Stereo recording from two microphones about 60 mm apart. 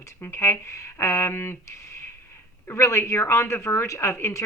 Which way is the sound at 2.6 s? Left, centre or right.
Left.